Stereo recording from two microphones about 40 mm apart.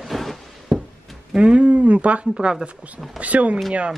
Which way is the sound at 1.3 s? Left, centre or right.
Right.